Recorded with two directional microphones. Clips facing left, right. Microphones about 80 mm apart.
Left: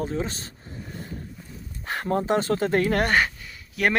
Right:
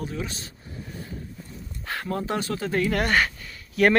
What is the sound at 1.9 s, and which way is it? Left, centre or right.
Speech, left.